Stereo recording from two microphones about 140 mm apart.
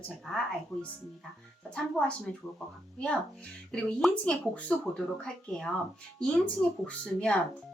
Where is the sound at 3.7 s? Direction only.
5° left (ahead or behind).